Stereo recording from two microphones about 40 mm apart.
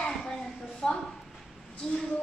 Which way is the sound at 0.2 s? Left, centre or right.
Centre.